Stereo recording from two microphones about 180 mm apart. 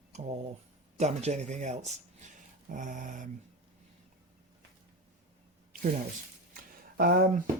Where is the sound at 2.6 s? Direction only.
45° right (ahead or behind).